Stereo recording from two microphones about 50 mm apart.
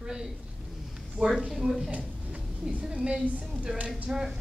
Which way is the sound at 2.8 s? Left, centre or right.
Centre.